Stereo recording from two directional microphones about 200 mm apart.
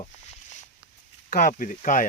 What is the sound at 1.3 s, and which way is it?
Speech, 45° left (ahead or behind).